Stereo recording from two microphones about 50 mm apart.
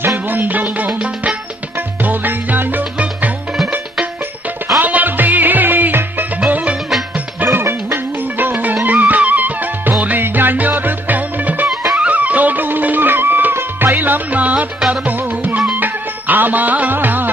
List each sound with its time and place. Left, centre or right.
0.3 s music: right
4.8 s music: right
6.4 s music: right
7.4 s music: right
8.4 s music: right